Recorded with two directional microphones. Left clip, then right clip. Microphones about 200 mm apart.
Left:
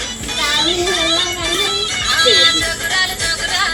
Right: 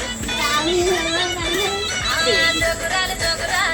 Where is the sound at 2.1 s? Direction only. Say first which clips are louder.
Left 6 dB; 45° left (ahead or behind).